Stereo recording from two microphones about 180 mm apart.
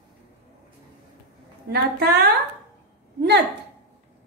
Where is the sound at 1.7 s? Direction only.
60° right (ahead or behind).